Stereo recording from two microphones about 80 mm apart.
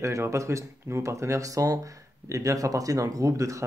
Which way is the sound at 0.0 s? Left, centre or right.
Right.